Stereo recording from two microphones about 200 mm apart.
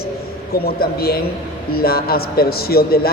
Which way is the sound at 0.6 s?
50° left (ahead or behind).